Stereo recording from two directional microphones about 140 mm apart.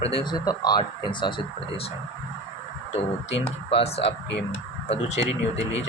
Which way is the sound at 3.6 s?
45° left (ahead or behind).